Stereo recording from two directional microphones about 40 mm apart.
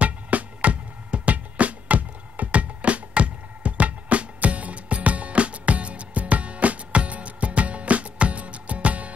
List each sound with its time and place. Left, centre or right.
0.0 s music: right